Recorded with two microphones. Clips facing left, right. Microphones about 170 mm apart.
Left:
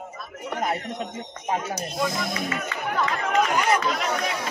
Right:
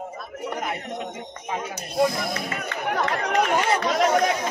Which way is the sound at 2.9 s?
45° right (ahead or behind).